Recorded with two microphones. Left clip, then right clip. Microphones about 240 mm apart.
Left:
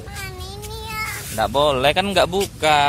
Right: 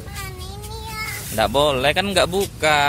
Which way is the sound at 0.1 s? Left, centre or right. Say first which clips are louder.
Left 1 dB; left.